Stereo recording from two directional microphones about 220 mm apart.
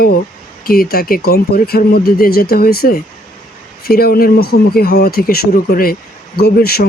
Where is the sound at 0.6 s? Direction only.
45° left (ahead or behind).